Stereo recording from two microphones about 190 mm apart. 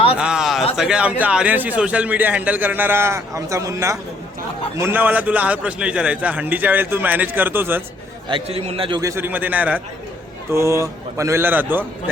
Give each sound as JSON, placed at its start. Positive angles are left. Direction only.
{"t": 0.2, "sound": "a sound", "side_deg": -5}
{"t": 0.8, "sound": "a man's voice", "side_deg": -5}
{"t": 8.3, "sound": "a man's voice", "side_deg": -30}
{"t": 9.0, "sound": "a man's voice", "side_deg": -15}